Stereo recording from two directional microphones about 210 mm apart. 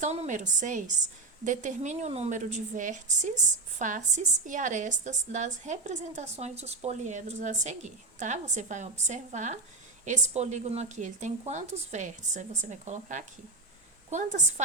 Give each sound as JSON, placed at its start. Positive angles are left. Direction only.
{"t": 0.0, "sound": "a woman's voice", "side_deg": -35}